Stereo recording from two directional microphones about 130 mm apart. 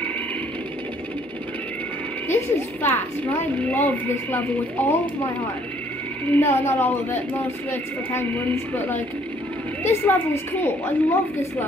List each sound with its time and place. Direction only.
2.2 s a woman's voice: 15° left (ahead or behind)
6.3 s a woman's voice: 15° left (ahead or behind)